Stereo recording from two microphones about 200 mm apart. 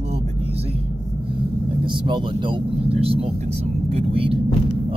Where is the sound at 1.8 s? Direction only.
25° right (ahead or behind).